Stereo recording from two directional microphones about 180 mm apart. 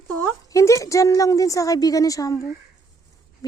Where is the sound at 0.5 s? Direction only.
15° left (ahead or behind).